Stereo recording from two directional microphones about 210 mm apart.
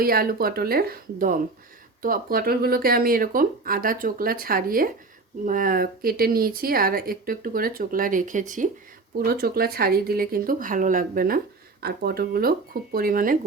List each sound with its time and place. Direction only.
0.0 s speech: 45° right (ahead or behind)